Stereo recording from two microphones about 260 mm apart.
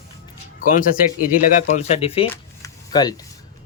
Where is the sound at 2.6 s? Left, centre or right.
Centre.